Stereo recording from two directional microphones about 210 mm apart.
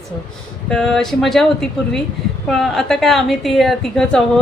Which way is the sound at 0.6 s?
Centre (ahead or behind).